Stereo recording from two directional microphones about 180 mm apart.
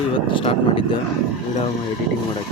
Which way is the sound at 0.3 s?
30° left (ahead or behind).